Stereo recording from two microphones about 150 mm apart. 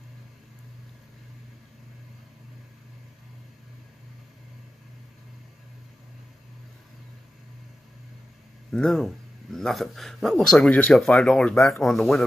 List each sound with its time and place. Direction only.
8.7 s speech: 5° left (ahead or behind)